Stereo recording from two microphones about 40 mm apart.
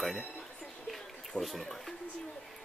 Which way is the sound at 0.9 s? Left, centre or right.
Centre.